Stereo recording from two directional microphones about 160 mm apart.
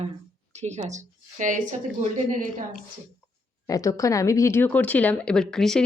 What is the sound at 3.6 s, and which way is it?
Speech, 20° left (ahead or behind).